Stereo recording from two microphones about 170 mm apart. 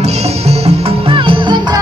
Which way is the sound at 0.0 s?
40° right (ahead or behind).